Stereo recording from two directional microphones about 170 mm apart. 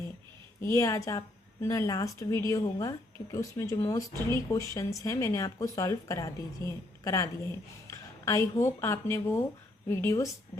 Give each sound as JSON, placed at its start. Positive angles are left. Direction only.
{"t": 0.6, "sound": "speech", "side_deg": 15}